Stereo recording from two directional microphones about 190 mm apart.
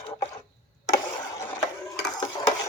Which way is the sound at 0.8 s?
15° left (ahead or behind).